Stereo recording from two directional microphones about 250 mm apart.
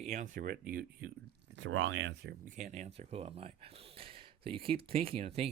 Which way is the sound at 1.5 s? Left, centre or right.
Right.